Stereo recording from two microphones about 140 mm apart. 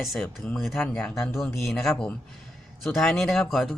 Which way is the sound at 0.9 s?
15° left (ahead or behind).